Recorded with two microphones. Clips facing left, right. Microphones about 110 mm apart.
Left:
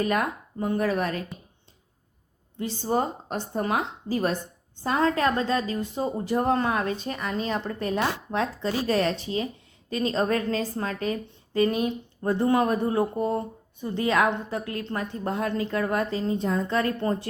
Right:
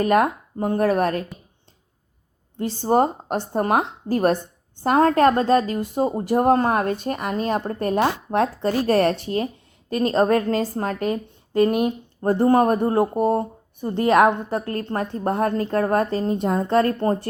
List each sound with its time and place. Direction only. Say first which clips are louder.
0.2 s speech: right 7 dB; 45° right (ahead or behind)
2.6 s speech: right 7 dB; 50° right (ahead or behind)
11.5 s speech: right 5 dB; 55° right (ahead or behind)
12.2 s speech: right 6 dB; 40° right (ahead or behind)